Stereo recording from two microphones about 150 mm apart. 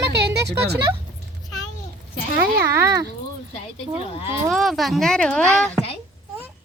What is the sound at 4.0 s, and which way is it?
Speech, 40° left (ahead or behind).